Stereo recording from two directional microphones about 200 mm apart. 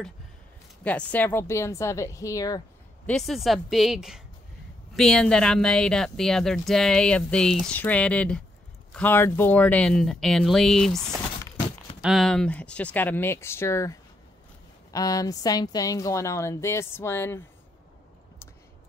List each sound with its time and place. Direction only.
0.8 s a woman's voice: 5° left (ahead or behind)
3.1 s a woman's voice: centre (ahead or behind)
12.0 s a woman's voice: centre (ahead or behind)